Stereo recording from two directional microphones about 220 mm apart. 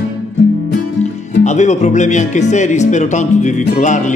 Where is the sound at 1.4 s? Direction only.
30° left (ahead or behind).